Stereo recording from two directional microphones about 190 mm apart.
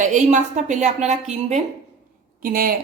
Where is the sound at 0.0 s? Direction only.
40° right (ahead or behind).